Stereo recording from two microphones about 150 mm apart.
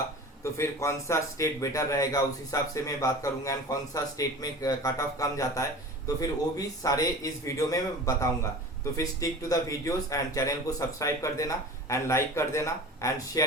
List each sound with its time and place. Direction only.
0.4 s a man's voice: 20° left (ahead or behind)
6.8 s a man's voice: 25° left (ahead or behind)